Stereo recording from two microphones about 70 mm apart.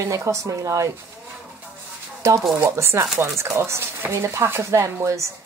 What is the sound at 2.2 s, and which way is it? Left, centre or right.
Speech, right.